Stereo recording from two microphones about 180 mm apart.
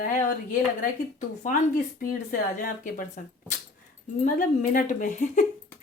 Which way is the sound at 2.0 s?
50° left (ahead or behind).